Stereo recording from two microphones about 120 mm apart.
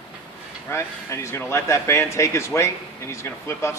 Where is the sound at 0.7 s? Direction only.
20° left (ahead or behind).